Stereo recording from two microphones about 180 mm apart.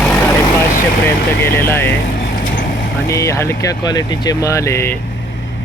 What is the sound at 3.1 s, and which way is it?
Speech, 15° left (ahead or behind).